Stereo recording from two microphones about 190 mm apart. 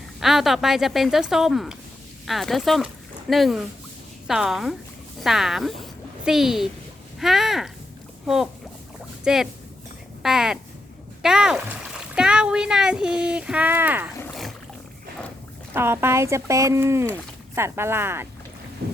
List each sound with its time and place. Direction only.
0.2 s speech: centre (ahead or behind)
9.2 s speech: centre (ahead or behind)
15.7 s speech: 10° right (ahead or behind)
18.8 s boat: 55° right (ahead or behind)